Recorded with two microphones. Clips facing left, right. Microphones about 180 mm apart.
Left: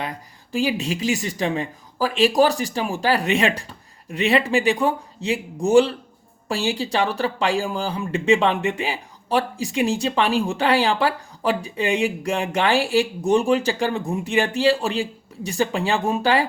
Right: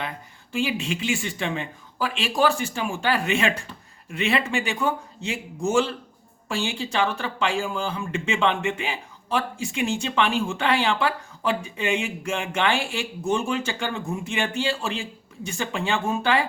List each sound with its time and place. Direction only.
0.5 s speech: 35° left (ahead or behind)